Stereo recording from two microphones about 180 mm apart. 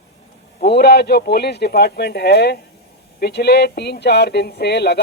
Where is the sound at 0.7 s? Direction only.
65° left (ahead or behind).